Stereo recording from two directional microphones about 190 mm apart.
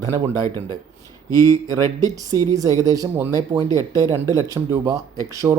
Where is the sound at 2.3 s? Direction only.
20° right (ahead or behind).